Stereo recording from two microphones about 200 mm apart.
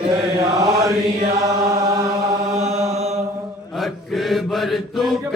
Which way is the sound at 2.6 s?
35° right (ahead or behind).